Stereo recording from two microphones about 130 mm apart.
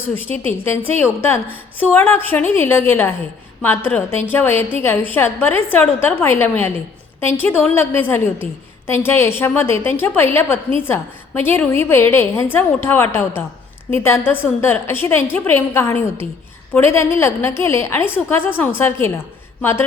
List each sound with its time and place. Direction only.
0.4 s a woman's voice: 15° left (ahead or behind)